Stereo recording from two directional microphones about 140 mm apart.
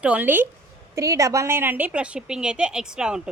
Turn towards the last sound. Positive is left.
turn(degrees=-5)  # may be behind; listen again after turning